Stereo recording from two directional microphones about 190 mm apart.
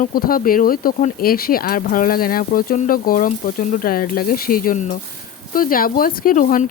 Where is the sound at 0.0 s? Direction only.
50° left (ahead or behind).